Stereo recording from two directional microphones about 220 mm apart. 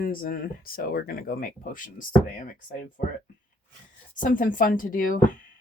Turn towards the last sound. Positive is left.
turn(degrees=40)  # may be behind; listen again after turning